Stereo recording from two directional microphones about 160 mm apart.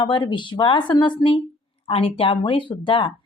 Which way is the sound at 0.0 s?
30° left (ahead or behind).